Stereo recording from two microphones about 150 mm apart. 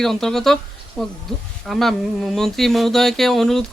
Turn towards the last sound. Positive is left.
turn(degrees=0)  # may be behind; listen again after turning